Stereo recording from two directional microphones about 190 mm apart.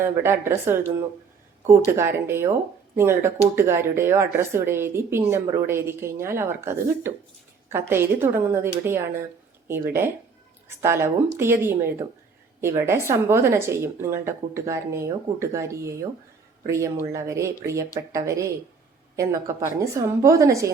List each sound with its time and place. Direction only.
0.0 s speech: 15° right (ahead or behind)